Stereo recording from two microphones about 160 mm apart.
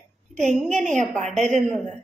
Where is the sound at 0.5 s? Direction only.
Centre (ahead or behind).